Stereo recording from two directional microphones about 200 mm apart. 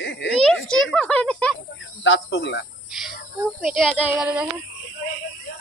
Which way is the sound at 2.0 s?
75° left (ahead or behind).